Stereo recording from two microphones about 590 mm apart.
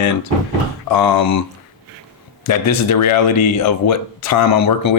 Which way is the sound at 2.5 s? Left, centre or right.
Left.